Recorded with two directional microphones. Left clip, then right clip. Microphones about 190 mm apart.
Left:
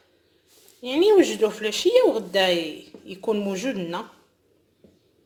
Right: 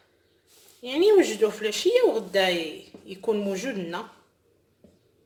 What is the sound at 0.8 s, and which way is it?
A woman's voice, 25° left (ahead or behind).